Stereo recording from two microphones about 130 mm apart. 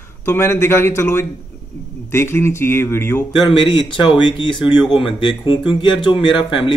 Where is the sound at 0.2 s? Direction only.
20° left (ahead or behind).